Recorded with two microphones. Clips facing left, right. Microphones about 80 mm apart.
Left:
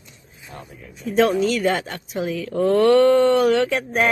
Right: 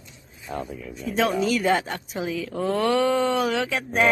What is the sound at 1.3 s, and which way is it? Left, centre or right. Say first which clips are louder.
Speech: left 2 dB; centre.